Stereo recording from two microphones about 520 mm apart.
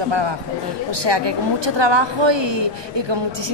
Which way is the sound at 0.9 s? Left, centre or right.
Right.